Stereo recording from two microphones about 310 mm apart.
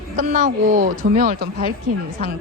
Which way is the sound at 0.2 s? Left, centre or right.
Right.